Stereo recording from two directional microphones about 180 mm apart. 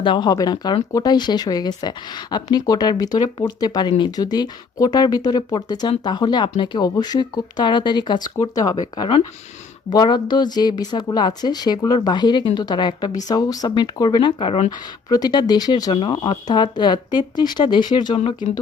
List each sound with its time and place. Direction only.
0.0 s speech: 25° left (ahead or behind)